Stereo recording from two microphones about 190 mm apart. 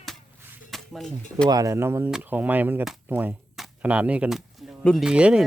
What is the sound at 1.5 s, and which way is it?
Speech, 20° right (ahead or behind).